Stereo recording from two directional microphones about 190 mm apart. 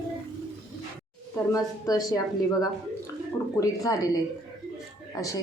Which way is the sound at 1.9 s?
20° left (ahead or behind).